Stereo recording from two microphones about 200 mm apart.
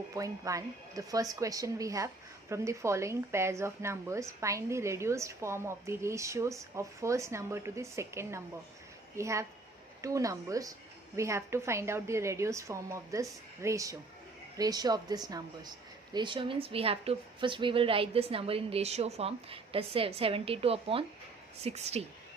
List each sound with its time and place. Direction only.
0.1 s a woman's voice: 15° right (ahead or behind); by 22.0 s 30° right (ahead or behind)